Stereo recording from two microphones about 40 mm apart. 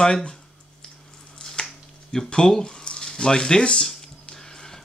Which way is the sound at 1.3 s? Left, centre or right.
Centre.